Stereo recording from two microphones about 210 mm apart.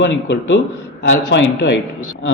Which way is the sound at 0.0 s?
60° left (ahead or behind).